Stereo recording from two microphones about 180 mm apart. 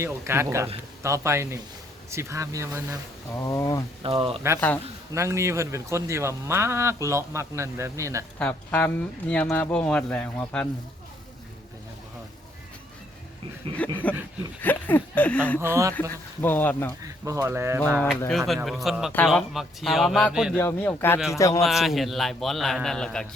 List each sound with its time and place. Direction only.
0.0 s speech: 15° right (ahead or behind)
3.3 s speech: 15° left (ahead or behind)
4.0 s speech: 30° right (ahead or behind)
5.1 s speech: 15° right (ahead or behind)
8.4 s speech: 10° left (ahead or behind)
13.8 s speech: 10° left (ahead or behind)
15.6 s speech: 15° right (ahead or behind)
16.0 s speech: 10° left (ahead or behind)
17.0 s speech: 15° right (ahead or behind)
18.3 s a man's voice: centre (ahead or behind)
20.6 s speech: 10° left (ahead or behind)
21.6 s a man's voice: centre (ahead or behind)